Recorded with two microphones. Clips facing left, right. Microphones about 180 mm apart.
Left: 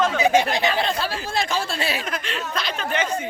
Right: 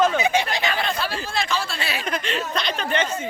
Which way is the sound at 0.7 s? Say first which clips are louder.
Left 2 dB; 30° left (ahead or behind).